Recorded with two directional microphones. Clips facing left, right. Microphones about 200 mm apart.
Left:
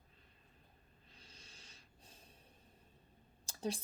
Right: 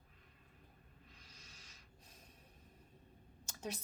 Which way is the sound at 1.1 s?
30° left (ahead or behind).